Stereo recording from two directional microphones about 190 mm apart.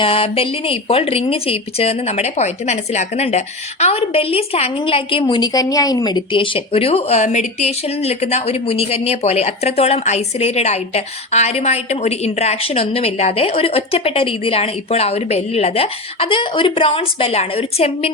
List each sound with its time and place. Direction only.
0.0 s speech: 30° left (ahead or behind)